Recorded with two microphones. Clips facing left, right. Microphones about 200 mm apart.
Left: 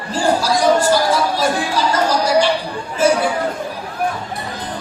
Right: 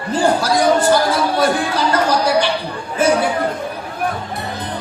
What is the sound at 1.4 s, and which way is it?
Speech, 60° right (ahead or behind).